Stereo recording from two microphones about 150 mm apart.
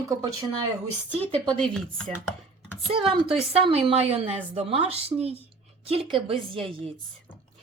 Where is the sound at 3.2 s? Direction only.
40° right (ahead or behind).